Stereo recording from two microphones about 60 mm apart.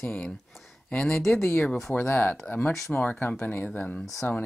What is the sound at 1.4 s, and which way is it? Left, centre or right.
Speech, left.